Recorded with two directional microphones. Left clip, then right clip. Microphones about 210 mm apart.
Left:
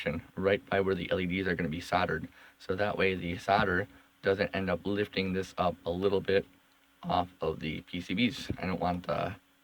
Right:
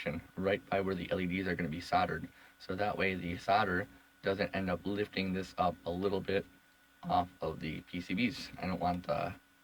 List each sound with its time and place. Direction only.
0.0 s speech: 30° left (ahead or behind)